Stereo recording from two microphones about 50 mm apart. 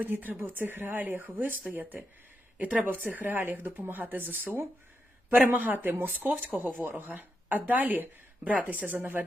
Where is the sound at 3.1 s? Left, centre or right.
Right.